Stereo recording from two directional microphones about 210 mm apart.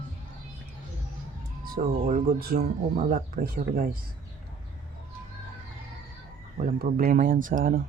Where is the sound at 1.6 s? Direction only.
40° right (ahead or behind).